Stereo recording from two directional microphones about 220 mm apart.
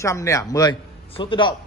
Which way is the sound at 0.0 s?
15° left (ahead or behind).